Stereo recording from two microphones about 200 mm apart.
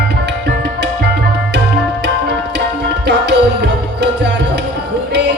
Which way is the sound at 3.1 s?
60° right (ahead or behind).